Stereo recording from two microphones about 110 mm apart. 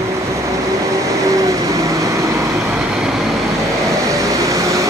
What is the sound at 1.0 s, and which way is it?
Vehicle, 30° right (ahead or behind).